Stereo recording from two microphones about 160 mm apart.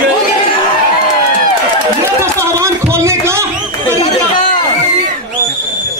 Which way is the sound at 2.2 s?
15° right (ahead or behind).